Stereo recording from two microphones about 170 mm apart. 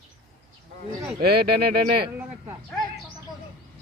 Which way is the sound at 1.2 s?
65° right (ahead or behind).